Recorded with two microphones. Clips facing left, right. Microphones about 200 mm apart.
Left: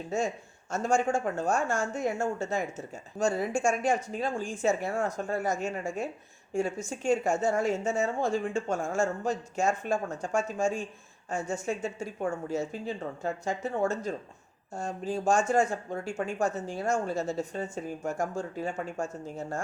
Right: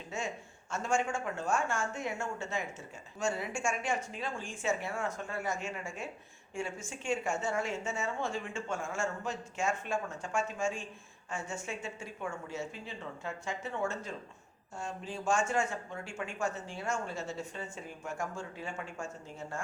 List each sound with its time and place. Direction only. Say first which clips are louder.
0.1 s speech: left 8 dB; 40° left (ahead or behind)